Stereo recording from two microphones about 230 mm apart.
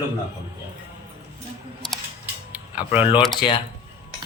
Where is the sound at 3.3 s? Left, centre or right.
Left.